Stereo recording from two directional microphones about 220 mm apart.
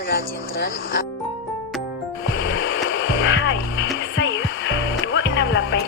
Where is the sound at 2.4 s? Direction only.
50° left (ahead or behind).